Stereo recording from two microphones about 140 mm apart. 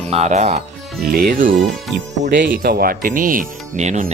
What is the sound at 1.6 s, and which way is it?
Speech, centre (ahead or behind).